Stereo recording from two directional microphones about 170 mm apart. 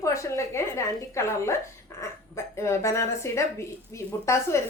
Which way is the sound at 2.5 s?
15° left (ahead or behind).